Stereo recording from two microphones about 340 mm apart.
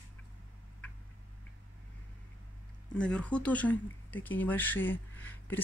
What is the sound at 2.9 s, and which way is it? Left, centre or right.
Speech, centre.